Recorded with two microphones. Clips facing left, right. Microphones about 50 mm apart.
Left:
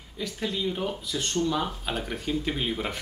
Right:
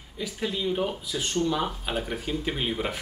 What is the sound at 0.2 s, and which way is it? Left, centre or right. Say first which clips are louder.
Speech: even; centre.